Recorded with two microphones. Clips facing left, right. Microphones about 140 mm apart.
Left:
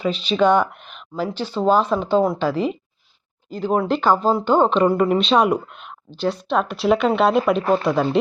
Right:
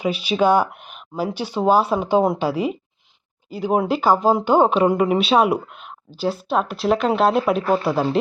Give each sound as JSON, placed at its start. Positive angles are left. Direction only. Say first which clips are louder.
{"t": 0.0, "sound": "speech", "louder": "left 1 dB", "side_deg": -10}
{"t": 7.6, "sound": "speech", "louder": "left 1 dB", "side_deg": 45}
{"t": 7.9, "sound": "speech", "louder": "left 1 dB", "side_deg": -5}